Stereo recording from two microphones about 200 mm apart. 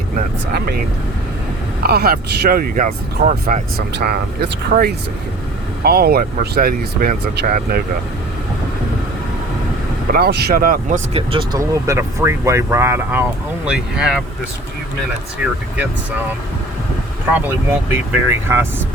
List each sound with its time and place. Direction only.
0.2 s speech: 50° right (ahead or behind)
1.8 s speech: 50° right (ahead or behind)
3.4 s speech: 50° right (ahead or behind)
10.1 s speech: 50° right (ahead or behind); by 11.6 s 25° right (ahead or behind)
11.6 s speech: 15° right (ahead or behind)
17.7 s speech: 10° right (ahead or behind)